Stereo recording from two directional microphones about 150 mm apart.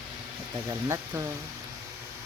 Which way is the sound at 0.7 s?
20° right (ahead or behind).